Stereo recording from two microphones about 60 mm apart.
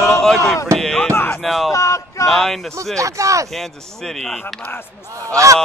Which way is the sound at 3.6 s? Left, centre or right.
Centre.